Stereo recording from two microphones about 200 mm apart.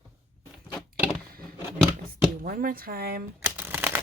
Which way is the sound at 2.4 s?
45° right (ahead or behind).